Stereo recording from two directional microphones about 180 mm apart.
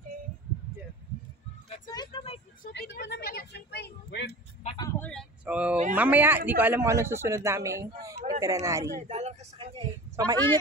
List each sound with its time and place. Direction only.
2.0 s vehicle: 30° left (ahead or behind)
2.7 s speech: 75° left (ahead or behind)
4.7 s speech: 15° left (ahead or behind)
5.4 s speech: 5° right (ahead or behind)
8.9 s a sound: 40° right (ahead or behind)
10.1 s a woman's voice: 20° right (ahead or behind)